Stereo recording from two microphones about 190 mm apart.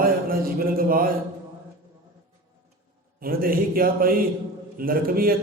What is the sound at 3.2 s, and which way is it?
A man's voice, 50° right (ahead or behind).